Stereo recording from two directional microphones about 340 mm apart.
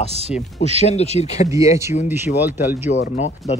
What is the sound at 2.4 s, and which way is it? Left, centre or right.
Speech, centre.